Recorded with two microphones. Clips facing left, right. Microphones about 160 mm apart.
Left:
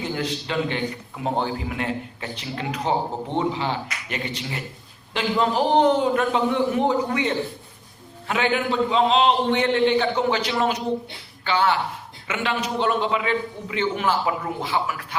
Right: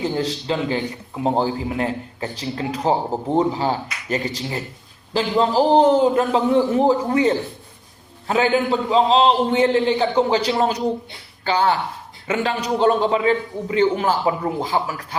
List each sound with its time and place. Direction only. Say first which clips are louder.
0.0 s a man's voice: right 4 dB; 35° right (ahead or behind)